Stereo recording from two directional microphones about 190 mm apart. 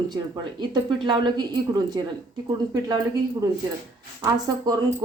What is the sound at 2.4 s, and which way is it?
Speech, 25° right (ahead or behind).